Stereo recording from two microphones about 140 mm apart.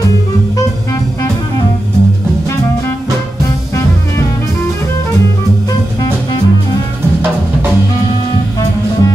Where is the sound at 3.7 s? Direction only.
20° left (ahead or behind).